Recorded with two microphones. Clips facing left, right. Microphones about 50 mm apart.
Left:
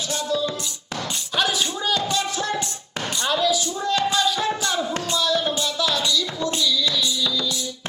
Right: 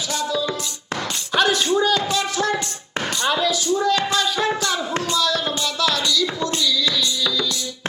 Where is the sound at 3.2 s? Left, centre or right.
Centre.